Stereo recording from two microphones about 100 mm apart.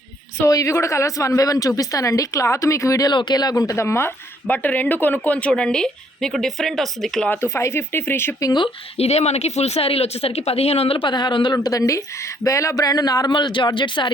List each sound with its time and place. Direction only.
0.4 s a woman's voice: 30° left (ahead or behind)
3.1 s a woman's voice: 50° left (ahead or behind); by 4.1 s 25° left (ahead or behind)
4.4 s speech: 15° left (ahead or behind)
7.3 s speech: 25° left (ahead or behind)
9.0 s speech: 90° left; by 11.5 s 50° left (ahead or behind)
11.5 s a woman's voice: 35° left (ahead or behind); by 14.1 s 55° left (ahead or behind)